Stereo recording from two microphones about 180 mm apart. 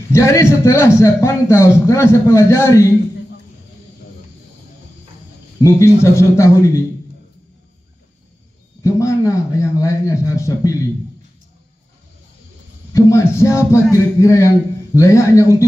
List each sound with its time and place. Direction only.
0.1 s a man's voice: 15° left (ahead or behind)
5.6 s a man's voice: 15° left (ahead or behind)
8.8 s a man's voice: 15° left (ahead or behind)
12.9 s a man's voice: 15° left (ahead or behind)